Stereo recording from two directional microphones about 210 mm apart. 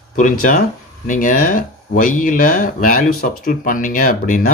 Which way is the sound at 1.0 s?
40° left (ahead or behind).